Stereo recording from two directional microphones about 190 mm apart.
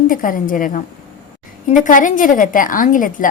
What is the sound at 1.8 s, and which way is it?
Speech, 45° left (ahead or behind).